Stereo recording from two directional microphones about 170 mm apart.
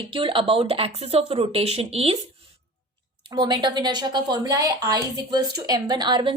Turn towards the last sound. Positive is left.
turn(degrees=-25)  # may be behind; listen again after turning